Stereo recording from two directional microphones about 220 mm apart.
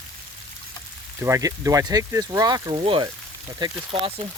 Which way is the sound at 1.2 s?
15° right (ahead or behind).